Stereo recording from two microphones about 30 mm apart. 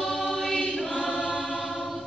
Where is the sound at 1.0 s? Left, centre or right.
Centre.